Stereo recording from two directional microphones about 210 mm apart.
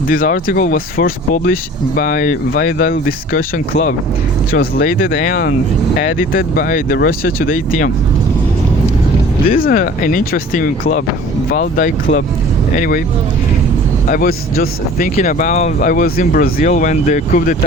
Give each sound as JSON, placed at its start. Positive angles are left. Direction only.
{"t": 0.1, "sound": "speech", "side_deg": 40}
{"t": 9.5, "sound": "speech", "side_deg": 40}
{"t": 14.1, "sound": "speech", "side_deg": 45}